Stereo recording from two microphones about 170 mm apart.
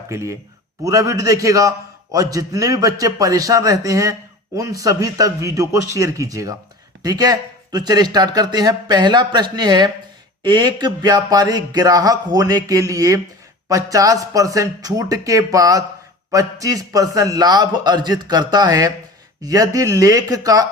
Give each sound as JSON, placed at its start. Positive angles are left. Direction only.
{"t": 0.1, "sound": "speech", "side_deg": -15}